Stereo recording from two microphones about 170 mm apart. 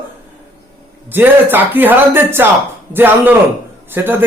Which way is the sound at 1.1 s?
10° right (ahead or behind).